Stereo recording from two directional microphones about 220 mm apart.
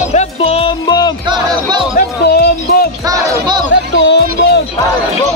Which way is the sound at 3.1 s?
20° right (ahead or behind).